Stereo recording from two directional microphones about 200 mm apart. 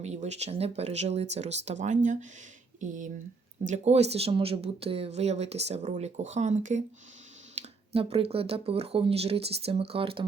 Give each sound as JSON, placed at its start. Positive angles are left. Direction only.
{"t": 0.0, "sound": "speech", "side_deg": -35}